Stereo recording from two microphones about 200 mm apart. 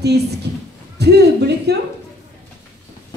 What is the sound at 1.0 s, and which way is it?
Speech, 55° right (ahead or behind).